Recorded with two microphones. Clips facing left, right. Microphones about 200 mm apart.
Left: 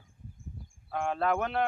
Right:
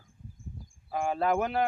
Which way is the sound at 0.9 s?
5° right (ahead or behind).